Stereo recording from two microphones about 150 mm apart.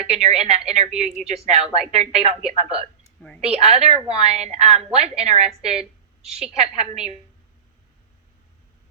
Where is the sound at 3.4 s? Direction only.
45° right (ahead or behind).